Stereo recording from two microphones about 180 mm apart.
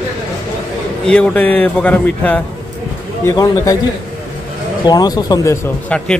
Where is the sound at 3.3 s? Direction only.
20° left (ahead or behind).